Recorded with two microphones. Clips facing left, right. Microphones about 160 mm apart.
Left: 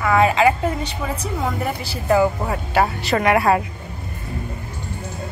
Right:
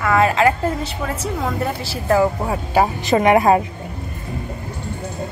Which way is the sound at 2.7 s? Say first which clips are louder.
Right 3 dB; 15° right (ahead or behind).